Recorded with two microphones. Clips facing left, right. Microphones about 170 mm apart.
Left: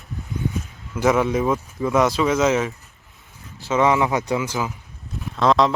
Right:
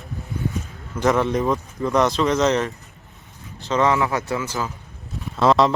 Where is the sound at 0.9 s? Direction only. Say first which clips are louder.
Left 1 dB; 10° left (ahead or behind).